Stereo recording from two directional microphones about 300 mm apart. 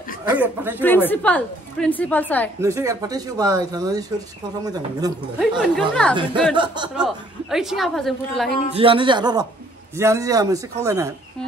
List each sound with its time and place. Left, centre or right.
0.2 s a woman's voice: centre
0.7 s a woman's voice: centre
2.6 s speech: centre
5.6 s a woman's voice: centre
6.5 s speech: centre
7.0 s a woman's voice: centre
8.7 s speech: centre